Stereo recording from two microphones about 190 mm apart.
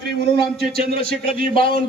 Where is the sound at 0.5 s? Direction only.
55° right (ahead or behind).